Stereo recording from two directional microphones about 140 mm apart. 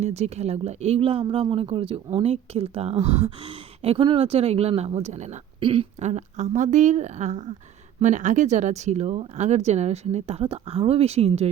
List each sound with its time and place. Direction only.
0.0 s speech: 50° right (ahead or behind)
5.5 s speech: 40° right (ahead or behind)
6.0 s speech: 55° right (ahead or behind)